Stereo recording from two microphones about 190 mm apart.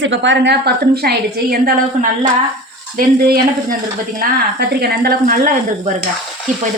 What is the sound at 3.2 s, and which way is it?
Speech, 50° right (ahead or behind).